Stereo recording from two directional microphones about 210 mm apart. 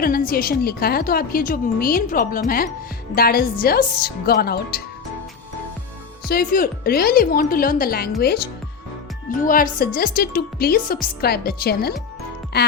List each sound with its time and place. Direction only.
0.0 s a woman's voice: 45° left (ahead or behind)
6.2 s a woman's voice: 45° left (ahead or behind)
9.3 s a woman's voice: 40° left (ahead or behind)